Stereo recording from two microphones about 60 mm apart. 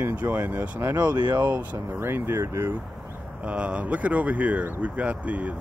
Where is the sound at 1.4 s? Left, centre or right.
Right.